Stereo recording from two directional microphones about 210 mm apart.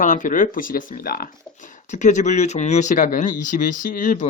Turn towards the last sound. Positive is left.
turn(degrees=40)  # may be behind; listen again after turning